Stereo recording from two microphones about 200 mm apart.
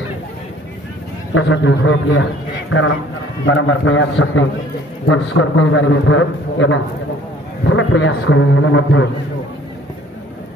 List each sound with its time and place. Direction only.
1.3 s a man's voice: 65° left (ahead or behind)
3.4 s a man's voice: 70° left (ahead or behind)